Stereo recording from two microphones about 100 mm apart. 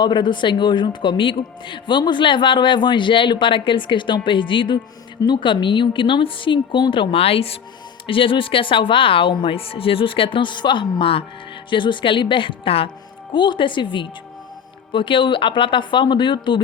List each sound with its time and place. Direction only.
0.0 s a man's voice: 50° left (ahead or behind); by 7.6 s 75° left (ahead or behind)
8.0 s a woman's voice: 60° left (ahead or behind)
13.3 s a woman's voice: 55° left (ahead or behind)